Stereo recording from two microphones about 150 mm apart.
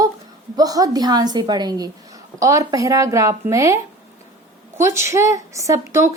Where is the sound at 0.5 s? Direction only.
25° right (ahead or behind).